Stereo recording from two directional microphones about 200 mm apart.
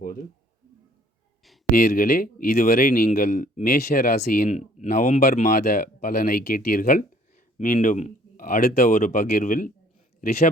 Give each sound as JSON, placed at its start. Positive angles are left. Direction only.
{"t": 1.9, "sound": "a man's voice", "side_deg": 45}